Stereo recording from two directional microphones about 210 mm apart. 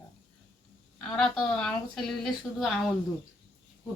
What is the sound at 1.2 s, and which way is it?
Speech, 5° left (ahead or behind).